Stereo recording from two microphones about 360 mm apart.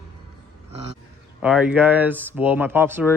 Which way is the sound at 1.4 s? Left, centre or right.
Centre.